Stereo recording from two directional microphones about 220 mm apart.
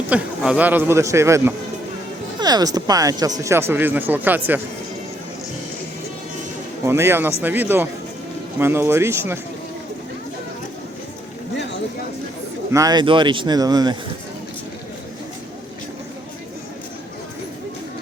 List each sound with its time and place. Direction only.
0.1 s speech: 5° right (ahead or behind)
6.8 s speech: 10° right (ahead or behind)
12.7 s speech: 15° right (ahead or behind)